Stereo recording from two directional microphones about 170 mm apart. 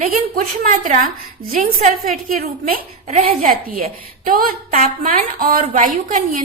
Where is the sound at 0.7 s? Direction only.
50° right (ahead or behind).